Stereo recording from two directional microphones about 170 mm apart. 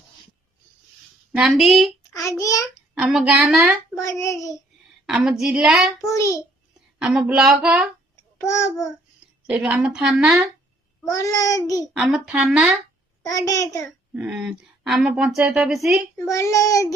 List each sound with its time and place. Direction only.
1.4 s speech: centre (ahead or behind)
2.4 s child singing: 20° left (ahead or behind)
3.0 s speech: 5° right (ahead or behind)
3.9 s child singing: 20° left (ahead or behind)
5.0 s speech: centre (ahead or behind)
6.0 s child singing: 20° left (ahead or behind)
7.0 s speech: 5° right (ahead or behind)
8.4 s child singing: 15° left (ahead or behind)
9.5 s speech: 5° right (ahead or behind)
11.1 s child singing: 20° left (ahead or behind)
11.9 s speech: 5° right (ahead or behind)
13.3 s child singing: 20° left (ahead or behind)
14.1 s speech: 10° right (ahead or behind)
16.1 s child singing: 15° left (ahead or behind)